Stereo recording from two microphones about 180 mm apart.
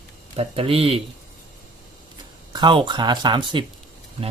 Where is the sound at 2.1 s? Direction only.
25° right (ahead or behind).